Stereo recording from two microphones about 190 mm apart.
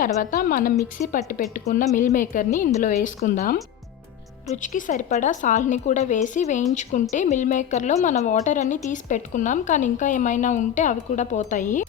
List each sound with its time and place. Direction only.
0.0 s a woman's voice: 45° left (ahead or behind)